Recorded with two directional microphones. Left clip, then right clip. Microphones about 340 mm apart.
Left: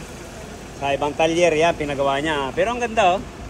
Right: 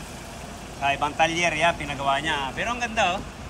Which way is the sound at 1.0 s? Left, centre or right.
Right.